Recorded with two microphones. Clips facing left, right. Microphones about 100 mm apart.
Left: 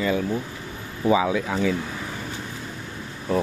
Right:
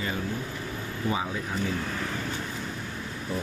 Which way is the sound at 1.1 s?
90° left.